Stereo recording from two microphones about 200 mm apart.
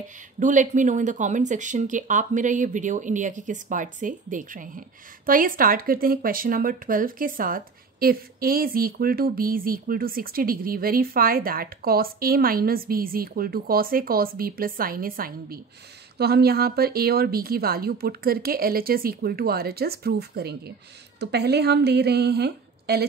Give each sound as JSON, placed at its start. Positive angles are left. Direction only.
{"t": 0.4, "sound": "speech", "side_deg": -40}